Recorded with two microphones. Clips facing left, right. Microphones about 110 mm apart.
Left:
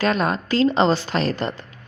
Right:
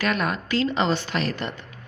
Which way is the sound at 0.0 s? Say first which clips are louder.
Left 4 dB; 30° left (ahead or behind).